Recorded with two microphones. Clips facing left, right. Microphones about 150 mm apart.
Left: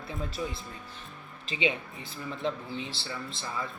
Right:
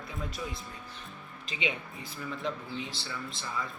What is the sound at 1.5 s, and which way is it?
Speech, 30° left (ahead or behind).